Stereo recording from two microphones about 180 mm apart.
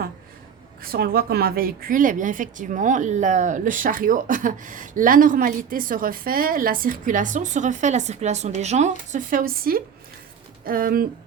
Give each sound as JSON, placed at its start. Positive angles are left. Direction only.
{"t": 0.8, "sound": "a woman's voice", "side_deg": -55}
{"t": 9.1, "sound": "a woman's voice", "side_deg": -50}